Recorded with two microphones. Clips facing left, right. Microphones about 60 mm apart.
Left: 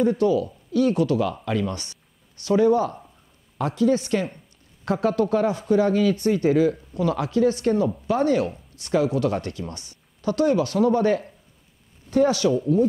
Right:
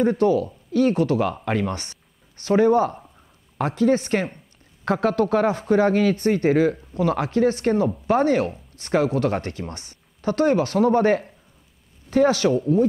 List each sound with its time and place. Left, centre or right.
0.0 s speech: right
12.1 s speech: right